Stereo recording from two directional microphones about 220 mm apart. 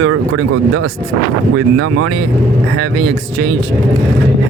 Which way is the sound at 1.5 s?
85° right.